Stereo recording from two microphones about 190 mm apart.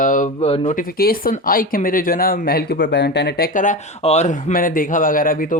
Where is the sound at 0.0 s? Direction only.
40° left (ahead or behind).